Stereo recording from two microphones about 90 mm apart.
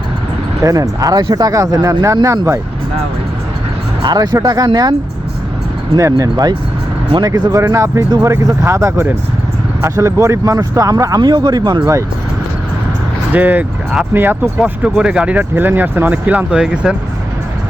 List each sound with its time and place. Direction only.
0.6 s speech: 40° right (ahead or behind)
4.0 s speech: 50° right (ahead or behind)
6.0 s speech: 35° right (ahead or behind)
7.5 s speech: 35° right (ahead or behind); by 11.8 s 50° right (ahead or behind)
13.3 s speech: 20° right (ahead or behind)
14.6 s speech: 10° right (ahead or behind)